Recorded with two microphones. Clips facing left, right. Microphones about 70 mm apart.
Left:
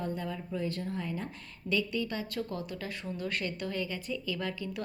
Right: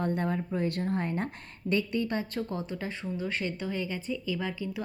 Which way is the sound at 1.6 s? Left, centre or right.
Right.